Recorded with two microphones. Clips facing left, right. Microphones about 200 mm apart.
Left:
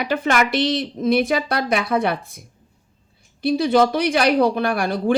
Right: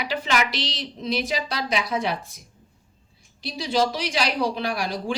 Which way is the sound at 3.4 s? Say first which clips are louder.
Left 8 dB; 55° left (ahead or behind).